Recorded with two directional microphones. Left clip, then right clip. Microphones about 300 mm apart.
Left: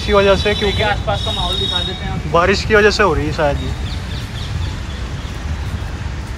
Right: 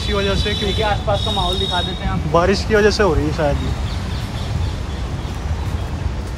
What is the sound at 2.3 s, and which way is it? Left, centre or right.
Speech, centre.